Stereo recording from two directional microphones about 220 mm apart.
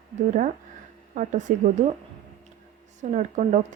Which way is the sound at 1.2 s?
35° right (ahead or behind).